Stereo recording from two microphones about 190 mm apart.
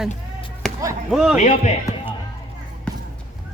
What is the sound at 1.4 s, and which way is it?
Speech, 40° left (ahead or behind).